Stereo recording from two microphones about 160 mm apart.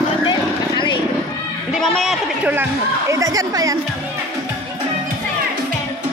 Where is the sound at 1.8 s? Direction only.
Centre (ahead or behind); by 3.7 s 20° right (ahead or behind).